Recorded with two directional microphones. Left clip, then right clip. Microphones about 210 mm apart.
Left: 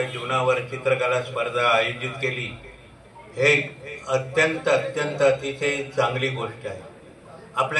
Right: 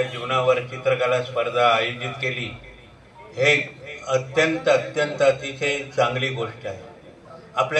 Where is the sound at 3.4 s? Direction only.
30° right (ahead or behind).